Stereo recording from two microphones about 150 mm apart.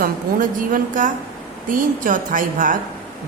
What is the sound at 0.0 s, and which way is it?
Speech, 65° right (ahead or behind).